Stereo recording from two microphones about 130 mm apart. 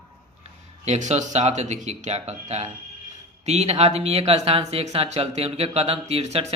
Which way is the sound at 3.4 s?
55° right (ahead or behind).